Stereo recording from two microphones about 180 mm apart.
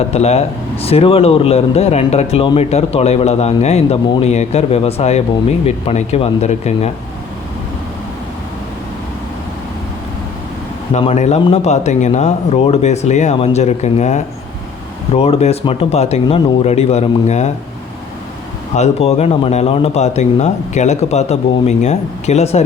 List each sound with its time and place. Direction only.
0.1 s speech: 35° left (ahead or behind)
10.9 s speech: 40° left (ahead or behind)
18.7 s speech: 35° left (ahead or behind)